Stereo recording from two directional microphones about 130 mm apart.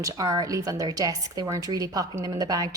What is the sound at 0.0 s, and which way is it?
Speech, 25° right (ahead or behind).